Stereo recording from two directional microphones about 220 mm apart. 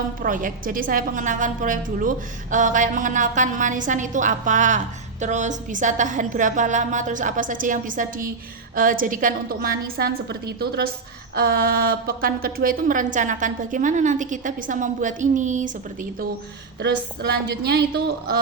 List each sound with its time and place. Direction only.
0.2 s a woman's voice: 35° right (ahead or behind)
17.5 s speech: 45° right (ahead or behind)